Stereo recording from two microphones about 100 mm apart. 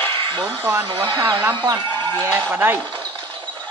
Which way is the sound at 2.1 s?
20° right (ahead or behind).